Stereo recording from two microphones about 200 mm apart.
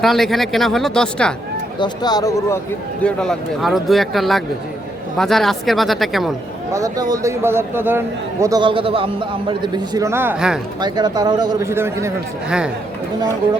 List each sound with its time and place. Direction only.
0.0 s speech: centre (ahead or behind)
1.8 s speech: 20° left (ahead or behind)
3.0 s speech: 5° left (ahead or behind)
6.7 s a man's voice: 15° right (ahead or behind)
10.8 s a man's voice: 20° right (ahead or behind); by 12.7 s 5° right (ahead or behind)